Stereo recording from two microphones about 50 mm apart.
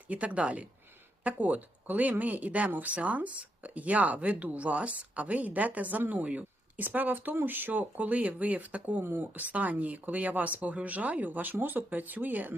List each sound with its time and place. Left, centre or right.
0.1 s speech: right
9.0 s speech: right